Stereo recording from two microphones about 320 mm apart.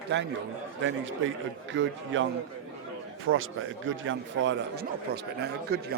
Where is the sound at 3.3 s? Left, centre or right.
Right.